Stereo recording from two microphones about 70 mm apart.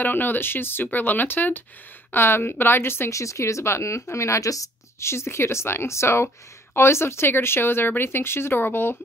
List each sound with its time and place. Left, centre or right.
0.0 s a woman's voice: left
3.1 s a woman's voice: left